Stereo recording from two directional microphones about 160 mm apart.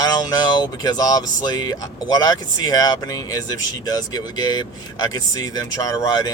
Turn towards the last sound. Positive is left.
turn(degrees=25)  # may be behind; listen again after turning